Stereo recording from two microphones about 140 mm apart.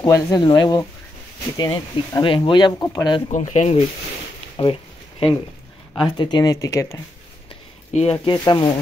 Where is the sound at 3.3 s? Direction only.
60° left (ahead or behind).